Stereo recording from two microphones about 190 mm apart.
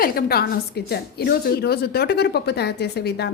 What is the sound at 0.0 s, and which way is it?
A woman's voice, 55° left (ahead or behind).